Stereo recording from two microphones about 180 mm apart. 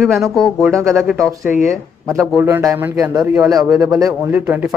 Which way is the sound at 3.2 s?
Centre (ahead or behind).